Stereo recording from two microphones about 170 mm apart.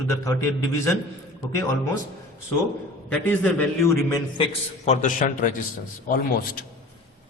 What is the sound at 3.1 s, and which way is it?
Speech, 10° left (ahead or behind).